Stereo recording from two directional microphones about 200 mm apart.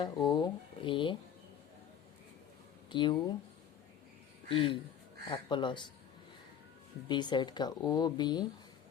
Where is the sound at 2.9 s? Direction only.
25° left (ahead or behind).